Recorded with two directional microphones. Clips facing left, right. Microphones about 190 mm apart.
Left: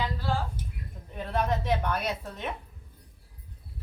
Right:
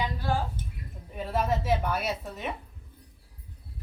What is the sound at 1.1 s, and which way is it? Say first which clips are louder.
A woman's voice: right 1 dB; 5° right (ahead or behind).